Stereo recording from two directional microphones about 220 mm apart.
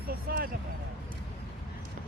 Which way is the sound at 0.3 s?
40° right (ahead or behind).